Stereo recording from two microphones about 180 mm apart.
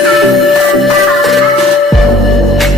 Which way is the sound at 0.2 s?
Centre (ahead or behind).